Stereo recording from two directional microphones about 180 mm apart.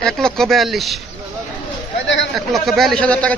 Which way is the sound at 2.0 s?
90° left.